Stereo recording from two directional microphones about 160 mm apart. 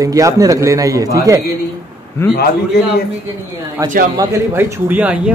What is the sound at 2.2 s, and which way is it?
Speech, 15° left (ahead or behind).